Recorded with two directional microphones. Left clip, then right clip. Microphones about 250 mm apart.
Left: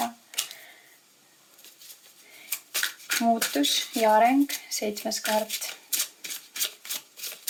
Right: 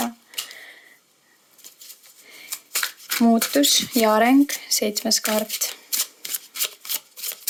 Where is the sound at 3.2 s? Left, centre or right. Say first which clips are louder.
Right 6 dB; right.